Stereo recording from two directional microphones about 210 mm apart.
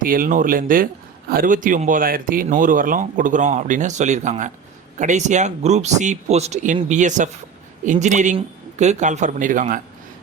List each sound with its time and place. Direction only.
0.0 s speech: 40° right (ahead or behind)